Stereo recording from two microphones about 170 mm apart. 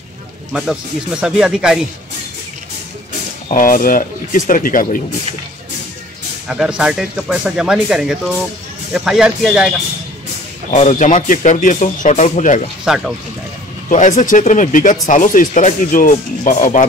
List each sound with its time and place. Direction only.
0.5 s speech: 5° right (ahead or behind)
3.4 s speech: 50° left (ahead or behind)
6.4 s speech: 5° right (ahead or behind)
10.7 s speech: 45° left (ahead or behind)
12.8 s speech: centre (ahead or behind)
13.8 s speech: 45° left (ahead or behind)